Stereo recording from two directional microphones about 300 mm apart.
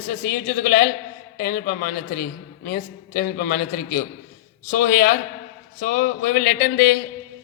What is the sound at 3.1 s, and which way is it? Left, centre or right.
Speech, left.